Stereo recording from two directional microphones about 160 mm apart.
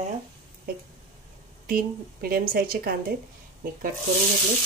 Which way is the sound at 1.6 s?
65° right (ahead or behind).